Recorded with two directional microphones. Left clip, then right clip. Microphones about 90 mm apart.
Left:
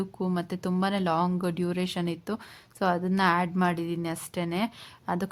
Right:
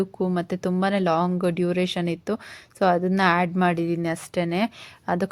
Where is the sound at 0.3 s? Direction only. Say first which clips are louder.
Right 3 dB; 35° right (ahead or behind).